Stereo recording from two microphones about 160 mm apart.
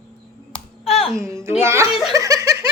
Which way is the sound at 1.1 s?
20° right (ahead or behind).